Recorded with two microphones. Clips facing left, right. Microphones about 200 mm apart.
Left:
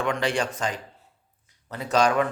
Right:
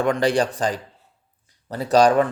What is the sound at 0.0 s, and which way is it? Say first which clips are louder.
Speech: right 6 dB; 35° right (ahead or behind).